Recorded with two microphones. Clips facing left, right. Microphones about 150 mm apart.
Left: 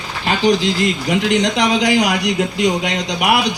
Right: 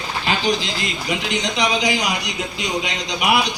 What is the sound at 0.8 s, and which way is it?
A man's voice, 60° left (ahead or behind).